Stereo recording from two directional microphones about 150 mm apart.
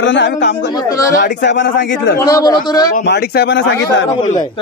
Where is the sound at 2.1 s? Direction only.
25° left (ahead or behind).